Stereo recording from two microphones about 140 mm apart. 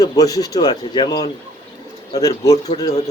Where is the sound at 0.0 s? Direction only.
25° left (ahead or behind).